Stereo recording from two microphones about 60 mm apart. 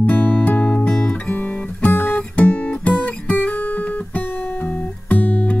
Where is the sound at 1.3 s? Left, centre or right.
Left.